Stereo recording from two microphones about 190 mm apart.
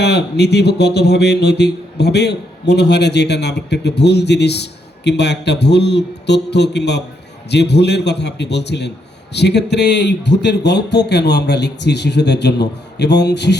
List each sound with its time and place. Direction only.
0.0 s speech: 60° left (ahead or behind)